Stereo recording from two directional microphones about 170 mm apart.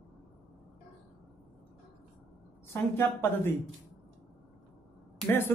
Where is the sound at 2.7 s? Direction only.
15° left (ahead or behind).